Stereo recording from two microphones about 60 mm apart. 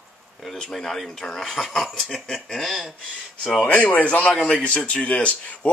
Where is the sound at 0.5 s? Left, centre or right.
Centre.